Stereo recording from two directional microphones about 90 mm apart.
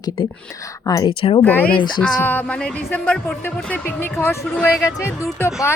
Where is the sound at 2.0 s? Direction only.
20° left (ahead or behind).